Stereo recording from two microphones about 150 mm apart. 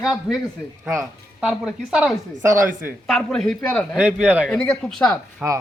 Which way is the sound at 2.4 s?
20° right (ahead or behind).